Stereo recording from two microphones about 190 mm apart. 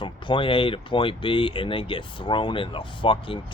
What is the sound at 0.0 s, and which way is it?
Speech, 25° left (ahead or behind).